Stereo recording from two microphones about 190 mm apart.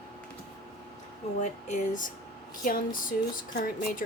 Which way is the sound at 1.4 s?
40° left (ahead or behind).